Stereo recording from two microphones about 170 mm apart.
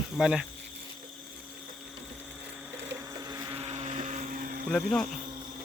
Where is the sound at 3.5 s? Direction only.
35° right (ahead or behind); by 4.6 s 55° right (ahead or behind).